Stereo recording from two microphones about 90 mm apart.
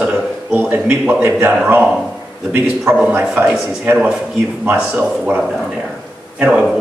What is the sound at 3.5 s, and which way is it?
A man's voice, 10° right (ahead or behind).